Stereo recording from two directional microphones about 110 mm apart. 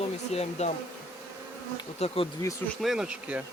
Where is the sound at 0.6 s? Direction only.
90° left.